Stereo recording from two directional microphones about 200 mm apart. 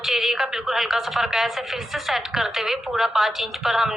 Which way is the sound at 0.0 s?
Centre (ahead or behind).